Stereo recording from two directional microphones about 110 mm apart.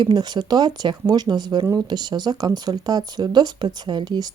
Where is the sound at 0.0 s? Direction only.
40° right (ahead or behind).